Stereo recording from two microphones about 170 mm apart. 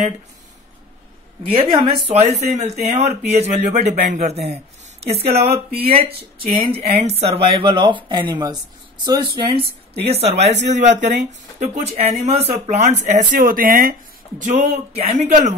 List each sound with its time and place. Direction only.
1.5 s speech: 30° right (ahead or behind); by 13.9 s 55° right (ahead or behind)
14.4 s speech: 40° right (ahead or behind)